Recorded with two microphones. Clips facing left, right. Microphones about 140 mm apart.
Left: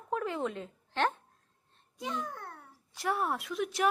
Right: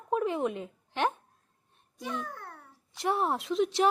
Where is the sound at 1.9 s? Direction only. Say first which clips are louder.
Even; 20° left (ahead or behind).